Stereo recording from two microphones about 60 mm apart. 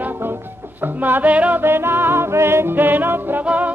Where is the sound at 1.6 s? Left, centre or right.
Right.